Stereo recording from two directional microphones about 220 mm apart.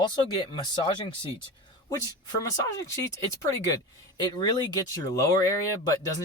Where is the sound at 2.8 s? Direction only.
15° left (ahead or behind).